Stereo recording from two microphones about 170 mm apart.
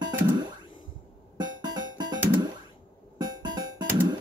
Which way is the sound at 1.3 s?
25° right (ahead or behind).